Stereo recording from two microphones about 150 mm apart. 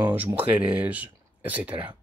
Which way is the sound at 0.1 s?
10° right (ahead or behind).